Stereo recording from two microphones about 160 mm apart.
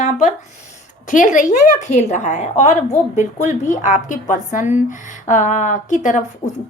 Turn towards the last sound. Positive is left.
turn(degrees=50)  # may be behind; listen again after turning